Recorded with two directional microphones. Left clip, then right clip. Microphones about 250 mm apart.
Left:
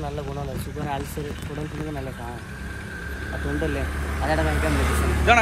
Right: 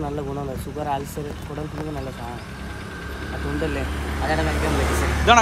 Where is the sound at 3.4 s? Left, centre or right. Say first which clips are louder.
Right 1 dB; right.